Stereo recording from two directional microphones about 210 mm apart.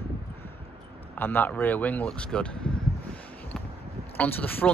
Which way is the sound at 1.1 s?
10° left (ahead or behind).